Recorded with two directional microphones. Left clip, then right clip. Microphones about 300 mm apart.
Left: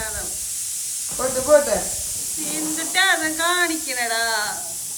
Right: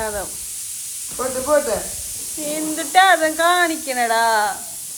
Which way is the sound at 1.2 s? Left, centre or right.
Centre.